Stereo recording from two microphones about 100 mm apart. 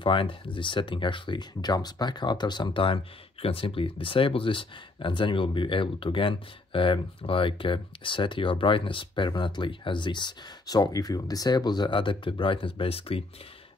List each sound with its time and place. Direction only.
0.0 s speech: 60° left (ahead or behind)